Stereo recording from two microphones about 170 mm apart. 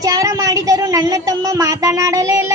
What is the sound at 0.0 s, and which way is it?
A woman's voice, 20° right (ahead or behind).